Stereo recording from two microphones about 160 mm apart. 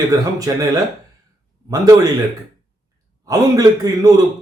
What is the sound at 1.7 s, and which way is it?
Speech, 20° right (ahead or behind).